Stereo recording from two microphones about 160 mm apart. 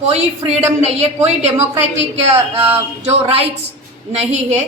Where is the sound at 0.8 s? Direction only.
40° right (ahead or behind).